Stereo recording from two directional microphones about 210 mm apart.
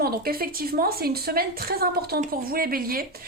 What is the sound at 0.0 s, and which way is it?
A woman's voice, 45° right (ahead or behind).